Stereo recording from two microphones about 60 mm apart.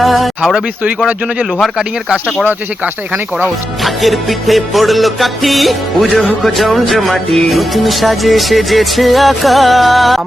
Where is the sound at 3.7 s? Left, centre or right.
Centre.